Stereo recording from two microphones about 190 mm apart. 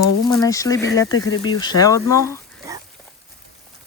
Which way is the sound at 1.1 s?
90° left.